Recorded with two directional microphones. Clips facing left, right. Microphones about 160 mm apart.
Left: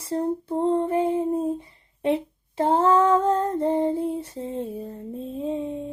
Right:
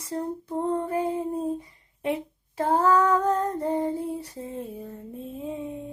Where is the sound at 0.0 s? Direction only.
30° left (ahead or behind).